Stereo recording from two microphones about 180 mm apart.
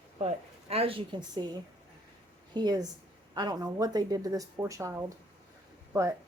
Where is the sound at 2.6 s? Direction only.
20° right (ahead or behind).